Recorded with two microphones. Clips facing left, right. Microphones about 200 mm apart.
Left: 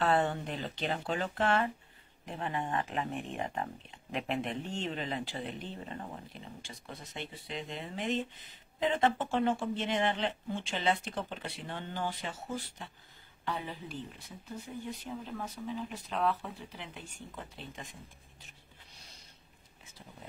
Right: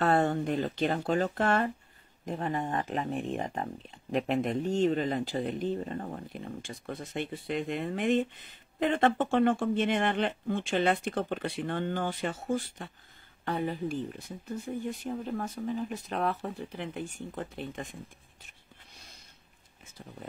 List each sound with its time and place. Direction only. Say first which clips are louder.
0.0 s speech: right 4 dB; 45° right (ahead or behind)